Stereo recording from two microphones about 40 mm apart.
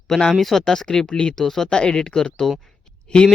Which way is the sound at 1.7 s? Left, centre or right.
Left.